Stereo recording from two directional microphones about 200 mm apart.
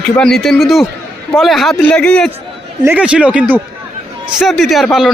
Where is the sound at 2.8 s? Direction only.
10° right (ahead or behind).